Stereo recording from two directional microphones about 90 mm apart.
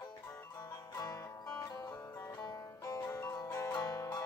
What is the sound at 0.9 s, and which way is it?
Music, 40° left (ahead or behind).